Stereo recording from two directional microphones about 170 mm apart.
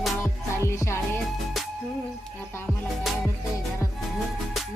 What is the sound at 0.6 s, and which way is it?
Speech, 15° left (ahead or behind).